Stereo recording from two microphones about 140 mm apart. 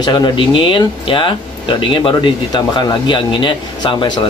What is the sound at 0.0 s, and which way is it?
Speech, 35° left (ahead or behind).